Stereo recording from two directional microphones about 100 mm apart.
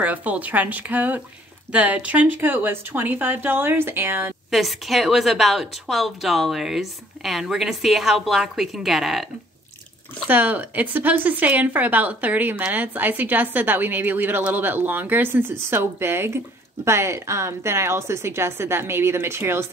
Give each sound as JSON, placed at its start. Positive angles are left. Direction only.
{"t": 0.0, "sound": "speech", "side_deg": -15}
{"t": 4.5, "sound": "a woman's voice", "side_deg": 0}
{"t": 10.2, "sound": "speech", "side_deg": -20}